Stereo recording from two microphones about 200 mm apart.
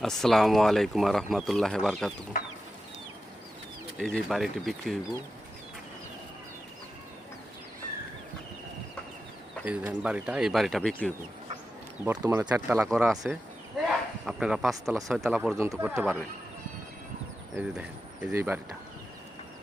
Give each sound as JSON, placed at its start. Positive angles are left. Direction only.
{"t": 0.0, "sound": "speech", "side_deg": 0}
{"t": 3.9, "sound": "speech", "side_deg": 5}
{"t": 9.6, "sound": "speech", "side_deg": -5}
{"t": 12.0, "sound": "speech", "side_deg": -15}
{"t": 12.9, "sound": "speech", "side_deg": 0}
{"t": 13.8, "sound": "a sound", "side_deg": 0}
{"t": 15.0, "sound": "speech", "side_deg": 0}
{"t": 17.5, "sound": "speech", "side_deg": -5}